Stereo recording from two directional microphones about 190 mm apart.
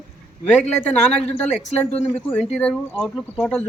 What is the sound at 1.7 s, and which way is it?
Speech, 35° left (ahead or behind).